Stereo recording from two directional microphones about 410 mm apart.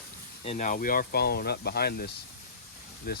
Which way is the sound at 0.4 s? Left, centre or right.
Centre.